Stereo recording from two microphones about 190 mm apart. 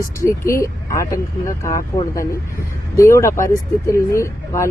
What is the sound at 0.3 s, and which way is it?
Speech, 15° left (ahead or behind).